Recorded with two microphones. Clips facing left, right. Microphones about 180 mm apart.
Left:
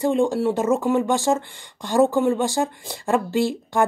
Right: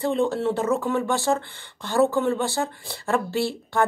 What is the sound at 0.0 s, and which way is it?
Speech, 15° left (ahead or behind).